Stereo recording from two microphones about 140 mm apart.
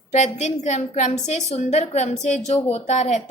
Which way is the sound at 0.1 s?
55° left (ahead or behind).